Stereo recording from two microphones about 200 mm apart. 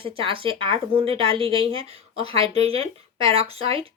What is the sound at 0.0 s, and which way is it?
A woman's voice, 25° right (ahead or behind).